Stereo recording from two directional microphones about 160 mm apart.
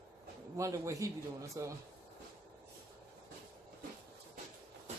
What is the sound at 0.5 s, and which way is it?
Speech, 20° right (ahead or behind).